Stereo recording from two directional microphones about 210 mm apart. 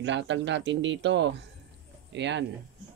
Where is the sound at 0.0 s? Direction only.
60° right (ahead or behind).